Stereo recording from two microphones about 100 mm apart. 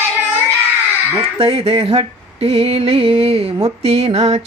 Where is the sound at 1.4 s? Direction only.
80° right.